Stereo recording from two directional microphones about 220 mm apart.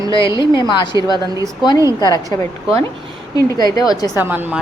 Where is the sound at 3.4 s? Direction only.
15° left (ahead or behind).